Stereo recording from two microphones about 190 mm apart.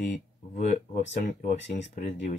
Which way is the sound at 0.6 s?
40° left (ahead or behind).